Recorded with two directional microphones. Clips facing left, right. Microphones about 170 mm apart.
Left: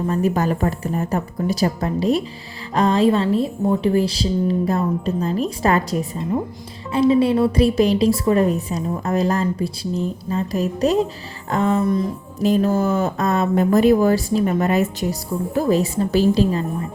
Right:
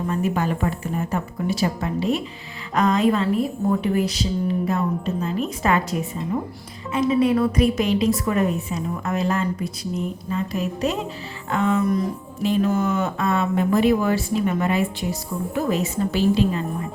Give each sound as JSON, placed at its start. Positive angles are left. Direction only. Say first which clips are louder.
{"t": 0.1, "sound": "a woman's voice", "louder": "left 3 dB", "side_deg": 40}